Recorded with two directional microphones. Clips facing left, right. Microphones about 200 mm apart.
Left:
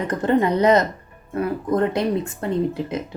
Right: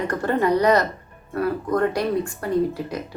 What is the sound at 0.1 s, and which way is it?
Speech, 20° left (ahead or behind).